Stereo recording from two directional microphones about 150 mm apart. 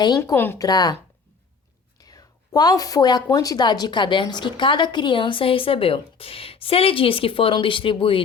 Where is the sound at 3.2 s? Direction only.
25° left (ahead or behind).